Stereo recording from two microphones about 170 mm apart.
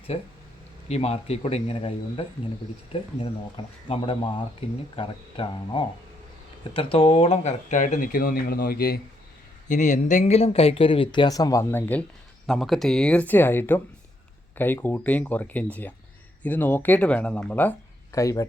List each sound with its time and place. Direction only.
0.9 s speech: 35° left (ahead or behind); by 9.0 s 60° left (ahead or behind)
9.6 s speech: 45° left (ahead or behind); by 18.4 s 20° left (ahead or behind)